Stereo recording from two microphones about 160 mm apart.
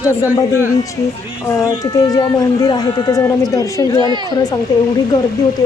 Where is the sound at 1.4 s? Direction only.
20° left (ahead or behind).